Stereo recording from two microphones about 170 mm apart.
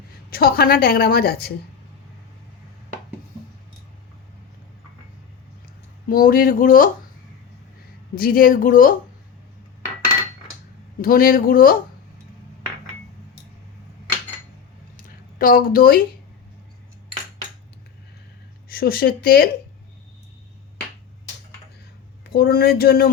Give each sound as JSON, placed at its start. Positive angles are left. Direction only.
{"t": 0.3, "sound": "a woman's voice", "side_deg": 60}
{"t": 6.1, "sound": "a woman's voice", "side_deg": 55}
{"t": 8.2, "sound": "a woman's voice", "side_deg": 60}
{"t": 11.0, "sound": "a woman's voice", "side_deg": 60}
{"t": 14.9, "sound": "a sound", "side_deg": 55}
{"t": 18.7, "sound": "a woman's voice", "side_deg": 60}
{"t": 22.2, "sound": "a woman's voice", "side_deg": 70}